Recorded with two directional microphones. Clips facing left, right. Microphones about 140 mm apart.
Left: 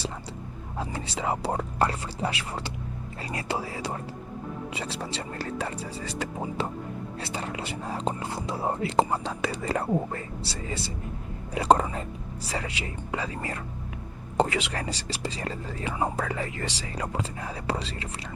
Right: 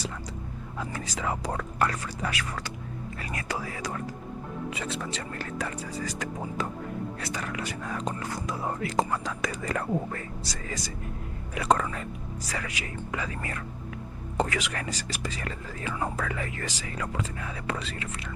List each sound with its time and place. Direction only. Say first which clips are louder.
0.8 s speech: left 2 dB; 30° left (ahead or behind)